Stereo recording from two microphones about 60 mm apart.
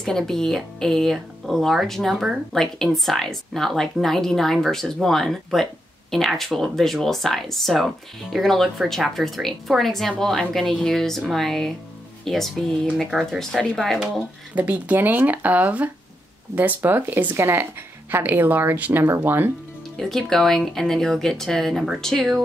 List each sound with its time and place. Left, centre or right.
0.0 s speech: centre
14.5 s speech: right
20.0 s speech: centre